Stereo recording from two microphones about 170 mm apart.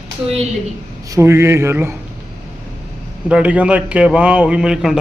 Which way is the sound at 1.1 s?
15° right (ahead or behind).